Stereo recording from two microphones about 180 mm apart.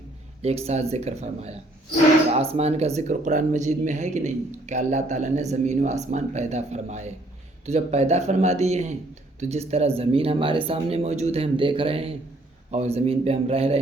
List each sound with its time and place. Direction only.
0.4 s speech: 35° right (ahead or behind)